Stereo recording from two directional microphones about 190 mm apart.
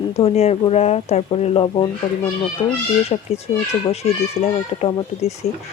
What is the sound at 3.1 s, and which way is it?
Speech, 25° left (ahead or behind).